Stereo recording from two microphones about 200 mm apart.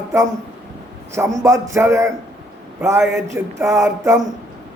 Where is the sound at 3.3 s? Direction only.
15° right (ahead or behind).